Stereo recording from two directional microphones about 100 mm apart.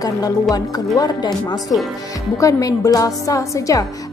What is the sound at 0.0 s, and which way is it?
A woman's voice, 35° left (ahead or behind).